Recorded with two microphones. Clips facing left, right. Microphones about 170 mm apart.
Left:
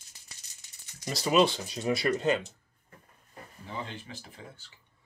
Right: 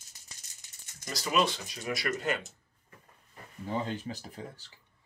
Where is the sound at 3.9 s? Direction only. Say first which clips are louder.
Right 7 dB; 40° right (ahead or behind).